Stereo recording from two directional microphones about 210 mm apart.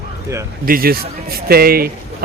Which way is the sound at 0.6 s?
45° right (ahead or behind).